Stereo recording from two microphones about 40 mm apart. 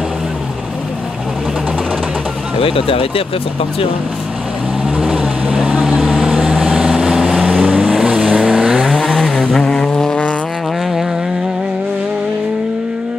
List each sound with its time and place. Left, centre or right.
5.1 s vehicle: right
5.6 s vehicle: centre
5.9 s vehicle: centre
7.4 s vehicle: centre
8.0 s vehicle: centre
8.8 s vehicle: centre